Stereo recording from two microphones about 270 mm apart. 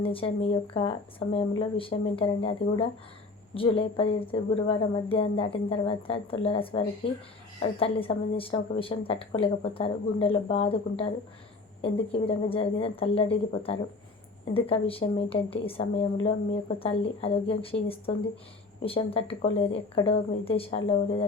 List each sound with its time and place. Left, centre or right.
0.0 s a woman's voice: centre